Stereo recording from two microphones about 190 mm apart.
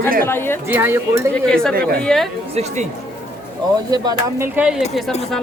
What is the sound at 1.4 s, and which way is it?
Speech, 5° left (ahead or behind).